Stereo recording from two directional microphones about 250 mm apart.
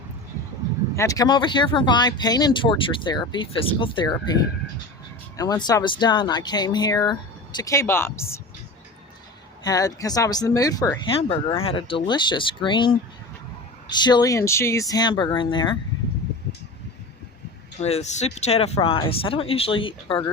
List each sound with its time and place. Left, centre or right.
0.9 s speech: centre
9.6 s speech: centre
17.7 s speech: left